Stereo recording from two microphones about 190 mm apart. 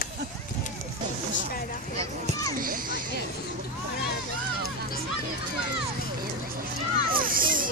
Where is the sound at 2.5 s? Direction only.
50° right (ahead or behind).